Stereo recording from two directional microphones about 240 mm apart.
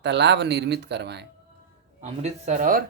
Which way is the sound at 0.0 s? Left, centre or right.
Right.